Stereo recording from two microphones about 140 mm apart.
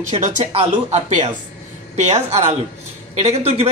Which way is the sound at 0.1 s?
55° right (ahead or behind).